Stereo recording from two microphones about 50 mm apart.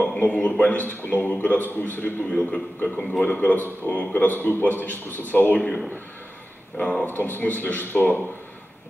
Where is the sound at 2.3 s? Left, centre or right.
Left.